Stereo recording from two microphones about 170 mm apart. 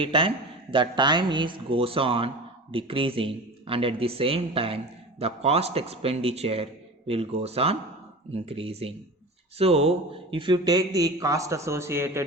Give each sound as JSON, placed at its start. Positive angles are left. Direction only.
{"t": 0.0, "sound": "a man's voice", "side_deg": -30}